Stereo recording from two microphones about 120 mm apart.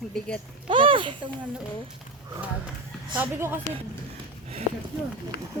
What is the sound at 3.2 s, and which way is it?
Speech, 20° right (ahead or behind).